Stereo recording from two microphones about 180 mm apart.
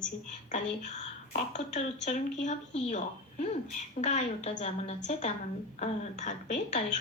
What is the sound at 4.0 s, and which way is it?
A woman's voice, 40° left (ahead or behind).